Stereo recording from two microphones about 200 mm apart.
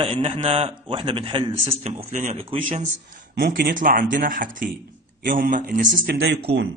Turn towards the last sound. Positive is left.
turn(degrees=-60)  # may be behind; listen again after turning